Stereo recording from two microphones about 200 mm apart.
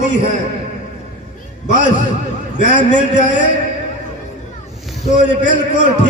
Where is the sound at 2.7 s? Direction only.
35° left (ahead or behind).